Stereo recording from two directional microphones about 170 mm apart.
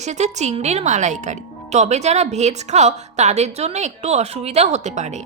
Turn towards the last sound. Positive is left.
turn(degrees=-45)  # may be behind; listen again after turning